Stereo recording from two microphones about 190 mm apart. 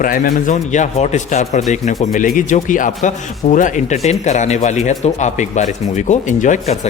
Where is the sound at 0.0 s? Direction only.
45° left (ahead or behind).